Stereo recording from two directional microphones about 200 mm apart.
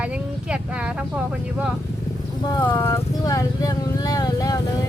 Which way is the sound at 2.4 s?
20° left (ahead or behind).